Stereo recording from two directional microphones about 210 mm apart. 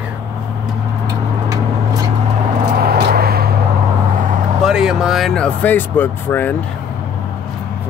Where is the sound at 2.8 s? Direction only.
50° right (ahead or behind).